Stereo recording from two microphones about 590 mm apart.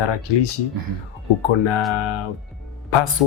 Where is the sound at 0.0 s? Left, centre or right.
Left.